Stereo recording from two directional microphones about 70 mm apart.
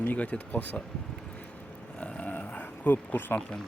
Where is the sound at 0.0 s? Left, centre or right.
Left.